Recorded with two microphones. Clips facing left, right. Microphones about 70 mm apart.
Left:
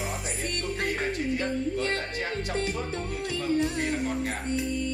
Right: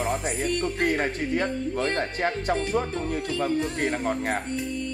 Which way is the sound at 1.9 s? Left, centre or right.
Right.